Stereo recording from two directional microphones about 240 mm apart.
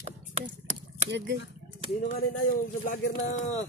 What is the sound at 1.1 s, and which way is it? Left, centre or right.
Speech, right.